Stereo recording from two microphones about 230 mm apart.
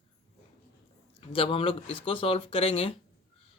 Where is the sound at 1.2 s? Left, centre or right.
Left.